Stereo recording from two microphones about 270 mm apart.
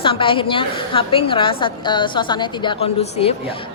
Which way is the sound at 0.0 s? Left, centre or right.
Centre.